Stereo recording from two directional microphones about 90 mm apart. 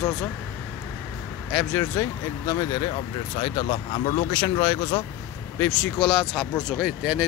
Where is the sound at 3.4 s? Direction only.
60° left (ahead or behind).